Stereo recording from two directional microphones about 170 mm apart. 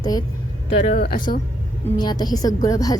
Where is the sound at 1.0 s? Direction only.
55° left (ahead or behind).